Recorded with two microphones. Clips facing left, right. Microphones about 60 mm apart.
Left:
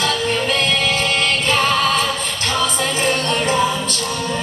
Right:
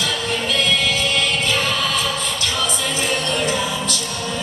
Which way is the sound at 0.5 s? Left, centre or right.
Left.